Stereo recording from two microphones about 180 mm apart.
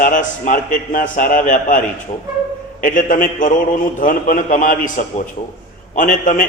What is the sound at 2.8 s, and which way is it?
A man's voice, 50° left (ahead or behind).